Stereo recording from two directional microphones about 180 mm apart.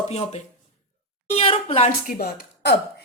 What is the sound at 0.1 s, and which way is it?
A woman's voice, 35° left (ahead or behind).